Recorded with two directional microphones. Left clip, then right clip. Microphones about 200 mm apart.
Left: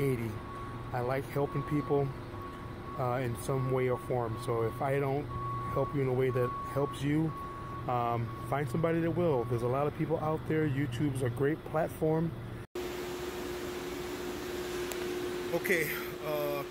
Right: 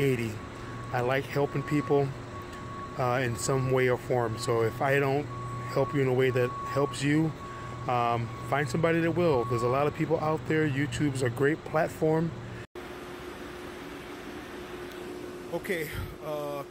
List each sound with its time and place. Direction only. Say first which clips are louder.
0.9 s speech: right 5 dB; 15° right (ahead or behind)
15.7 s speech: left 3 dB; 15° right (ahead or behind)